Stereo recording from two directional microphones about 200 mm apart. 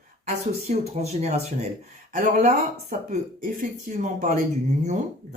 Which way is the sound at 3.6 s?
40° right (ahead or behind).